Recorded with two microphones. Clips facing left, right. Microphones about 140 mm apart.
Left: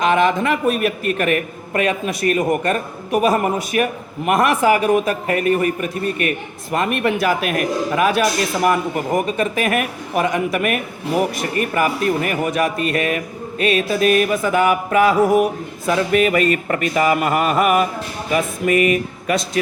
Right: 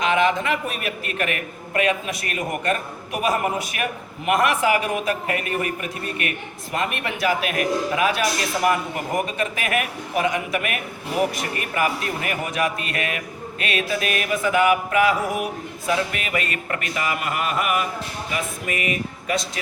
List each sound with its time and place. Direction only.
0.0 s speech: 45° left (ahead or behind)